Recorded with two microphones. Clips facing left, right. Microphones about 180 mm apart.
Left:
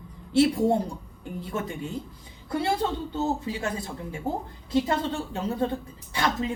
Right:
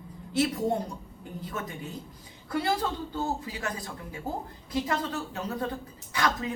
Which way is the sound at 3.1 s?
25° left (ahead or behind).